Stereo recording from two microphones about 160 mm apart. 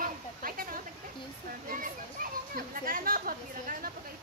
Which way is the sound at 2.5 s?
60° right (ahead or behind).